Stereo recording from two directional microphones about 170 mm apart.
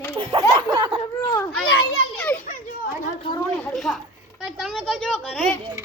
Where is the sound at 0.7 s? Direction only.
30° right (ahead or behind).